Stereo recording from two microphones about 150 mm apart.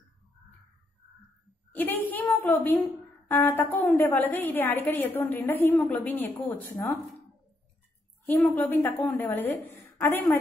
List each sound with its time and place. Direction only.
1.7 s a sound: 10° left (ahead or behind)
3.3 s a woman's voice: 15° left (ahead or behind)
8.3 s a woman's voice: 10° left (ahead or behind)